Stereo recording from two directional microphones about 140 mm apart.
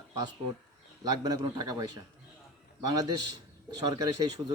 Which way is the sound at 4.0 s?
30° right (ahead or behind).